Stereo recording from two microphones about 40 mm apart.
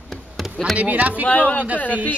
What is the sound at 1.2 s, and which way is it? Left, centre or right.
Speech, left.